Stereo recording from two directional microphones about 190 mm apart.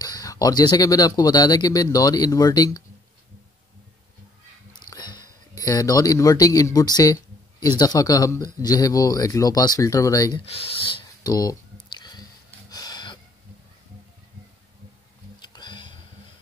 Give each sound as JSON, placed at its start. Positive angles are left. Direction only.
{"t": 0.0, "sound": "speech", "side_deg": 20}
{"t": 4.7, "sound": "sniff", "side_deg": 20}
{"t": 5.6, "sound": "speech", "side_deg": 20}
{"t": 10.4, "sound": "clicking", "side_deg": 30}
{"t": 12.6, "sound": "a sound", "side_deg": 20}
{"t": 15.4, "sound": "a sound", "side_deg": 25}